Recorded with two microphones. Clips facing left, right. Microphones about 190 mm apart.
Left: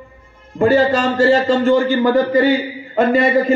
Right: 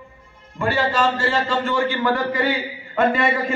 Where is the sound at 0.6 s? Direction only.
40° left (ahead or behind).